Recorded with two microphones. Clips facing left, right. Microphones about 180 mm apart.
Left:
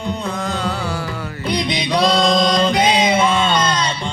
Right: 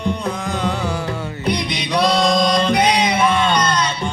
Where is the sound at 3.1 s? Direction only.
25° left (ahead or behind).